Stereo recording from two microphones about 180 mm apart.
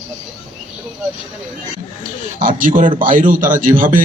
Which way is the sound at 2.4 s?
50° right (ahead or behind).